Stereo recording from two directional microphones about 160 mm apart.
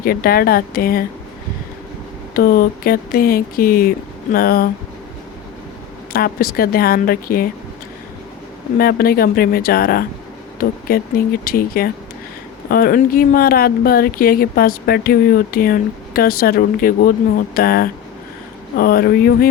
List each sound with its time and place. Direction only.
0.0 s speech: 65° left (ahead or behind)
2.3 s speech: 65° left (ahead or behind)
6.1 s speech: 70° left (ahead or behind)
8.8 s speech: 70° left (ahead or behind)